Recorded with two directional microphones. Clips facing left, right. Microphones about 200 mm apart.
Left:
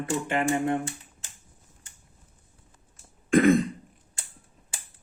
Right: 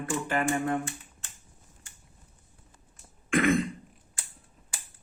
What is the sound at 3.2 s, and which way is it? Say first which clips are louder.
Throat clearing: left 6 dB; 35° left (ahead or behind).